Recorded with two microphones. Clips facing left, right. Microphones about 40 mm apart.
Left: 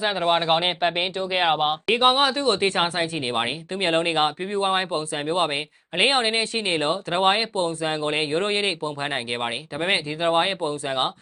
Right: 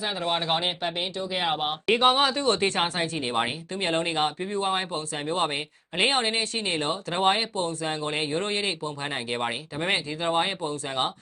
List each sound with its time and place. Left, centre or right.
0.0 s speech: left
0.8 s speech: left
2.5 s speech: centre